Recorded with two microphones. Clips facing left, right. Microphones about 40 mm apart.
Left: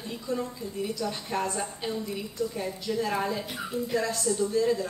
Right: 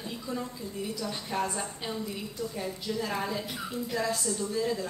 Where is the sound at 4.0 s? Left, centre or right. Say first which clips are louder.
Even; centre.